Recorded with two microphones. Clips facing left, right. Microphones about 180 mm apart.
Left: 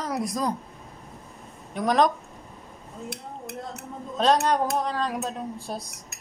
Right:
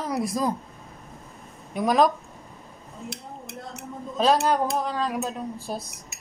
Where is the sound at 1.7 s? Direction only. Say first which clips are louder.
Right 1 dB; 5° right (ahead or behind).